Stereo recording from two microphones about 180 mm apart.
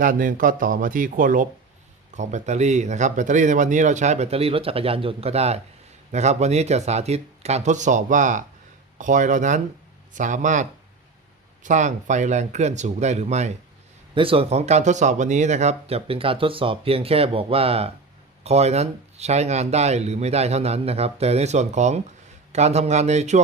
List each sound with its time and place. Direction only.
0.0 s speech: 50° right (ahead or behind)